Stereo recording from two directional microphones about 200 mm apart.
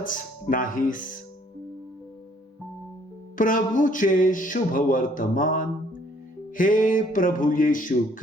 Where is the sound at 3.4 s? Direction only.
40° left (ahead or behind).